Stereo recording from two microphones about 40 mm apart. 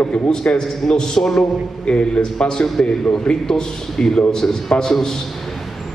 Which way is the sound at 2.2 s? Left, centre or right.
Centre.